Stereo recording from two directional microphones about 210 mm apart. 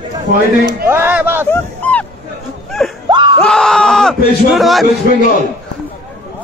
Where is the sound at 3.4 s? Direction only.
5° left (ahead or behind).